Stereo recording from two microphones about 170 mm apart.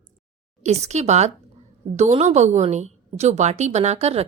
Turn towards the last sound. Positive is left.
turn(degrees=-40)  # may be behind; listen again after turning